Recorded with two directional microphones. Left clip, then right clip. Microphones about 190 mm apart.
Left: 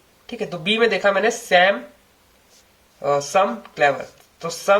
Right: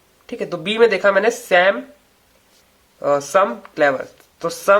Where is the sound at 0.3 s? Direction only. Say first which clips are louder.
Even; 50° right (ahead or behind).